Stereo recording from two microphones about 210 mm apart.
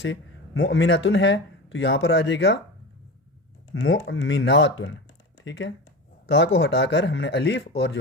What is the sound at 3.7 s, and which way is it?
Speech, 70° left (ahead or behind).